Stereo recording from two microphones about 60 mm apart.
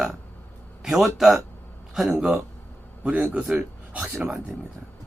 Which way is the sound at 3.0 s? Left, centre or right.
Right.